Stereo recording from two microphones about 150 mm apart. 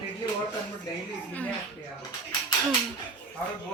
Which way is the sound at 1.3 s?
10° left (ahead or behind).